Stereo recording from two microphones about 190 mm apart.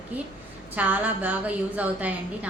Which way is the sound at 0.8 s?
10° right (ahead or behind).